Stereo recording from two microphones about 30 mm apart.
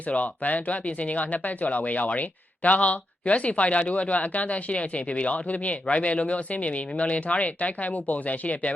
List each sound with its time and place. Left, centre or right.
0.1 s speech: left